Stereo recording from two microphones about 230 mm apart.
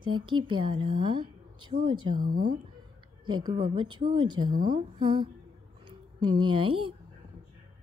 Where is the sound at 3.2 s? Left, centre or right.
Centre.